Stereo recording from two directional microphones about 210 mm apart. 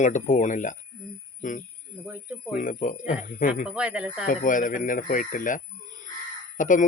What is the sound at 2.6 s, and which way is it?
Speech, 40° left (ahead or behind).